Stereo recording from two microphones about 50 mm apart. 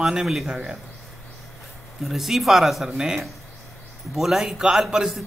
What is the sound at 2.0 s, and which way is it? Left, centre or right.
A man's voice, centre.